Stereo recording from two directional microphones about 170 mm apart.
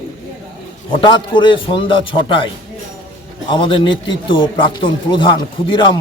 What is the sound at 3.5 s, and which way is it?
A man's voice, 30° left (ahead or behind).